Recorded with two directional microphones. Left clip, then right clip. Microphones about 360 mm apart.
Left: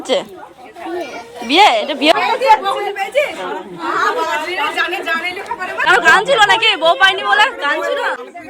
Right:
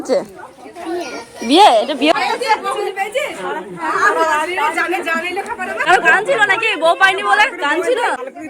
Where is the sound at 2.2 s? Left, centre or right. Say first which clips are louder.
Left 4 dB; left.